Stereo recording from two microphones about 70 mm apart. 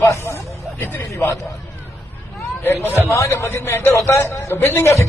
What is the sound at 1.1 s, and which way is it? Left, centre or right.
Speech, left.